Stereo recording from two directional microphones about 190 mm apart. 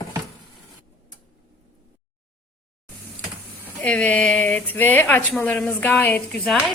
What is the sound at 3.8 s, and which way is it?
Speech, 5° left (ahead or behind).